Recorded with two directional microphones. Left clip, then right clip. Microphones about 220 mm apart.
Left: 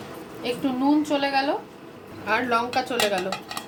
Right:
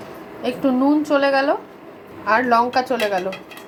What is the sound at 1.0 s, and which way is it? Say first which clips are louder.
Speech: right 6 dB; 20° right (ahead or behind).